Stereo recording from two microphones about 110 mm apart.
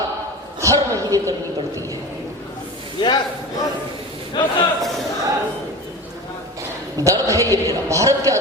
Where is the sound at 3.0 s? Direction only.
45° left (ahead or behind).